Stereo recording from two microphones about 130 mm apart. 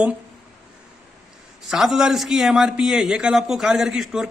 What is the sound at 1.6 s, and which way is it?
A man's voice, 5° right (ahead or behind).